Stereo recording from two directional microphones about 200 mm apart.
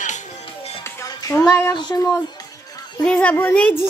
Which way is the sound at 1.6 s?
20° left (ahead or behind).